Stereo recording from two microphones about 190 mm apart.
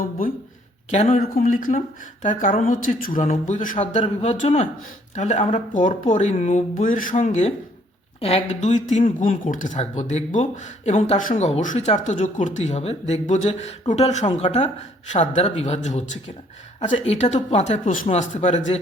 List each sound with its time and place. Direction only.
0.9 s speech: 35° left (ahead or behind)
1.2 s speech: 50° left (ahead or behind)